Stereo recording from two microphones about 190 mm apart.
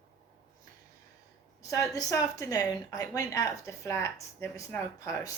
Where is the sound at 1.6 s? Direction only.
15° left (ahead or behind).